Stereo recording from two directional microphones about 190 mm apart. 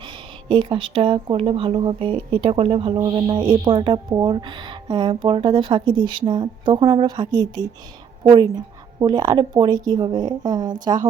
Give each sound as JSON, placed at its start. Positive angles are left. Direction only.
{"t": 0.5, "sound": "speech", "side_deg": -25}